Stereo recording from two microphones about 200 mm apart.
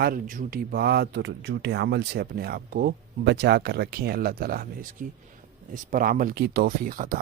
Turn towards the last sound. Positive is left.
turn(degrees=-45)  # may be behind; listen again after turning